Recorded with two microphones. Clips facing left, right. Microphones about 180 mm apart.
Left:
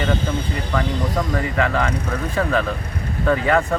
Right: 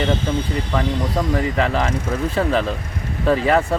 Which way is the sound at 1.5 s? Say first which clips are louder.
Right 1 dB; 30° right (ahead or behind).